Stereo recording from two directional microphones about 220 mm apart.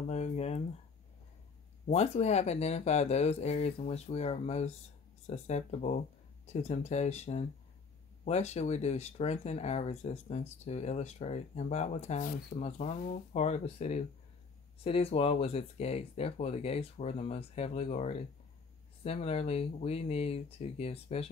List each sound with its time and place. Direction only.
0.1 s speech: 30° left (ahead or behind)
1.9 s speech: 30° left (ahead or behind)